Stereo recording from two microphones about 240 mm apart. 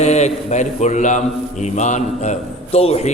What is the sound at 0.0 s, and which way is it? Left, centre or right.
A man's voice, left.